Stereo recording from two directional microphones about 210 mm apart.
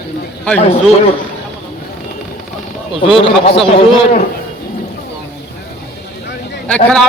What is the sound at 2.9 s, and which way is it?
A man's voice, 25° left (ahead or behind).